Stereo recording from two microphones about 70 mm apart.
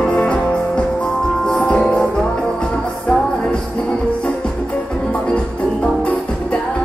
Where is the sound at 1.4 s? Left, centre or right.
Centre.